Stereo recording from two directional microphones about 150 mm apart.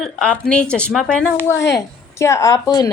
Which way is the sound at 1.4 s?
20° left (ahead or behind).